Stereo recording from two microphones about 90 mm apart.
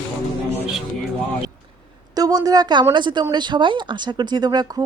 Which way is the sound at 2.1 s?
45° right (ahead or behind).